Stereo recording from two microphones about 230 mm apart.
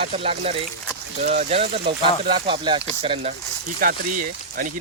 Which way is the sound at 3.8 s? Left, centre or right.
Right.